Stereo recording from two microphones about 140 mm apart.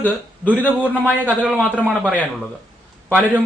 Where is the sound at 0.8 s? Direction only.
10° right (ahead or behind).